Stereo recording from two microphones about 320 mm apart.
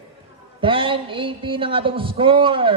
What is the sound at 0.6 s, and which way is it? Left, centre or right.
A man's voice, centre.